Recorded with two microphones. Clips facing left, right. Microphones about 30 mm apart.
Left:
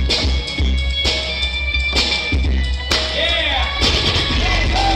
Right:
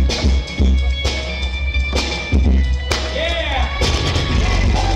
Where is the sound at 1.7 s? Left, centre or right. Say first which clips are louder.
Left 3 dB; left.